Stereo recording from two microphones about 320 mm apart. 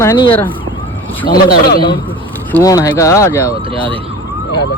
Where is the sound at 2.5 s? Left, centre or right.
Centre.